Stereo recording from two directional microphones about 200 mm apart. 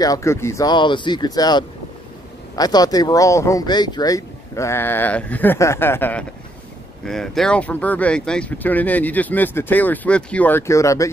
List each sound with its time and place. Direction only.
0.0 s speech: 15° left (ahead or behind)